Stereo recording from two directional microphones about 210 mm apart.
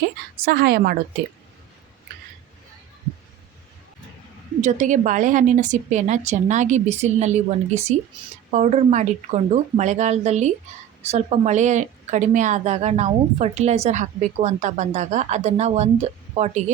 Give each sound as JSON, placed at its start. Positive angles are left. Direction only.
{"t": 0.4, "sound": "a woman's voice", "side_deg": -50}
{"t": 4.6, "sound": "a woman's voice", "side_deg": -35}